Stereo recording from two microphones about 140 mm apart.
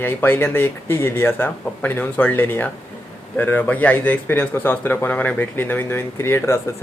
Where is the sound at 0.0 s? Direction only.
15° left (ahead or behind).